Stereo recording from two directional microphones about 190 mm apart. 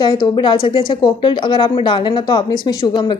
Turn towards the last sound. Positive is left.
turn(degrees=25)  # may be behind; listen again after turning